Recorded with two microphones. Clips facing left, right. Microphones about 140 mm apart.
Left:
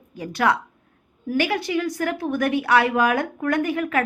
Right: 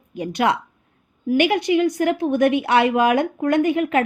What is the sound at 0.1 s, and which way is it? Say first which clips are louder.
A woman's voice: right 1 dB; 20° right (ahead or behind).